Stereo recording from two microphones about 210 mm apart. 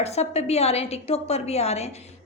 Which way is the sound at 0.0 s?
30° left (ahead or behind).